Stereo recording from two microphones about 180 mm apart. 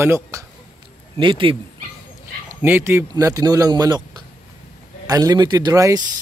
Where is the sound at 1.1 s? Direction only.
30° right (ahead or behind).